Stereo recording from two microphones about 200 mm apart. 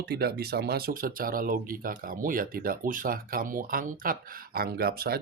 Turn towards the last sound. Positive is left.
turn(degrees=-50)  # may be behind; listen again after turning